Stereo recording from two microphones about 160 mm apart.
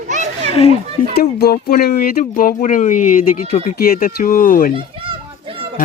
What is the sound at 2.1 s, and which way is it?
Speech, 60° left (ahead or behind).